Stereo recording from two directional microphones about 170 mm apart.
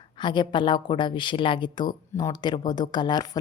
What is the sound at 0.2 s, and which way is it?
A woman's voice, 25° left (ahead or behind).